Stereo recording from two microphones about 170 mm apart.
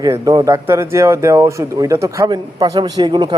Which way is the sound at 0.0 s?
20° right (ahead or behind).